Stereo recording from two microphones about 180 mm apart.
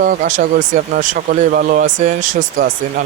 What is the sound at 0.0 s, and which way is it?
Speech, 50° right (ahead or behind).